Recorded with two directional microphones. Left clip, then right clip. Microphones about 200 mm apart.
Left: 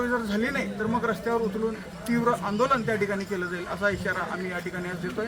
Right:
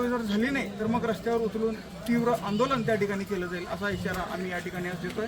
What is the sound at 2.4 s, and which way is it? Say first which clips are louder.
Speech: left 2 dB; 5° left (ahead or behind).